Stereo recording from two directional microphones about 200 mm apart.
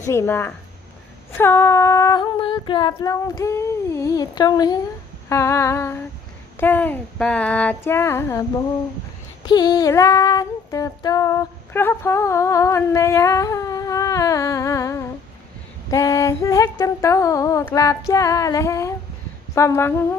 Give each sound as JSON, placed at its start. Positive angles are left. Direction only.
{"t": 0.0, "sound": "female singing", "side_deg": 15}
{"t": 9.5, "sound": "female singing", "side_deg": 20}